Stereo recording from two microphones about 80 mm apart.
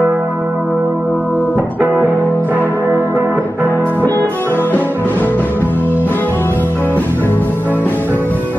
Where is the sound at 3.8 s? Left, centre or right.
Left.